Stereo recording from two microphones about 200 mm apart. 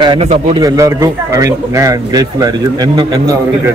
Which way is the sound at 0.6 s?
15° right (ahead or behind).